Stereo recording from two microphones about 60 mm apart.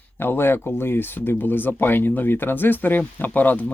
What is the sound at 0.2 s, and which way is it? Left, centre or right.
Speech, left.